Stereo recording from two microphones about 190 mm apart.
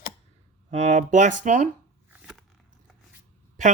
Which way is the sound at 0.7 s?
35° right (ahead or behind).